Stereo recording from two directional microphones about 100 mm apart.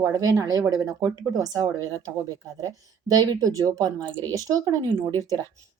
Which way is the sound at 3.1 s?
40° right (ahead or behind).